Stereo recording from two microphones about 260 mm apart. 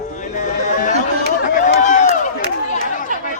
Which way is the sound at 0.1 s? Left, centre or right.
Left.